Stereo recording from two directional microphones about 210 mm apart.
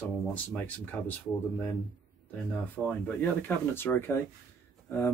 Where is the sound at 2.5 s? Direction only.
5° left (ahead or behind).